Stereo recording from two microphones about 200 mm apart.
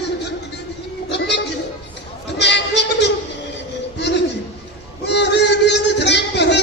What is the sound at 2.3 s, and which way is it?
Bleat, 60° left (ahead or behind).